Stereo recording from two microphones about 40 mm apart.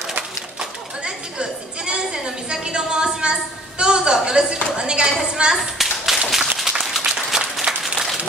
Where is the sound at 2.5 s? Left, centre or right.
Right.